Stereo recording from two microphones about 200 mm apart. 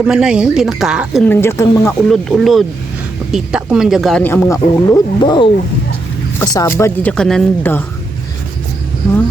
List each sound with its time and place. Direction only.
0.0 s speech: 5° right (ahead or behind)
1.2 s speech: 10° left (ahead or behind)
2.0 s speech: centre (ahead or behind)
4.2 s speech: 10° left (ahead or behind)